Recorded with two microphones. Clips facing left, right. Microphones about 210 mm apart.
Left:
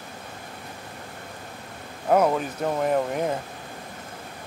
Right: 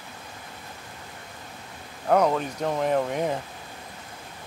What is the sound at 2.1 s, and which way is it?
Speech, 5° left (ahead or behind).